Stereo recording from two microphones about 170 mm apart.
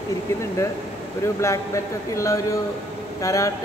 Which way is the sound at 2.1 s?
20° left (ahead or behind).